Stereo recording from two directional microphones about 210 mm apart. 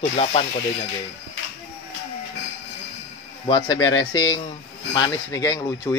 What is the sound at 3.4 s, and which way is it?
Speech, 25° left (ahead or behind).